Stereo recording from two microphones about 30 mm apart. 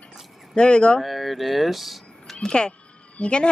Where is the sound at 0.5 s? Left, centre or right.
Left.